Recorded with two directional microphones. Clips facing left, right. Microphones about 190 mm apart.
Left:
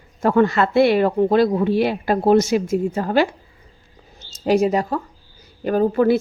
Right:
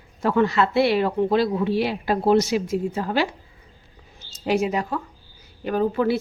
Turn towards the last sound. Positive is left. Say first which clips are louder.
# left 5 dB
turn(degrees=45)  # may be behind; listen again after turning